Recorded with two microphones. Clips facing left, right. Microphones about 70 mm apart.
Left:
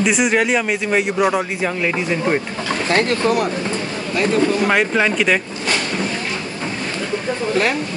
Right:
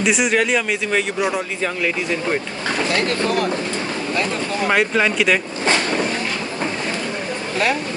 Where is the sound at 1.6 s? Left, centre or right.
Centre.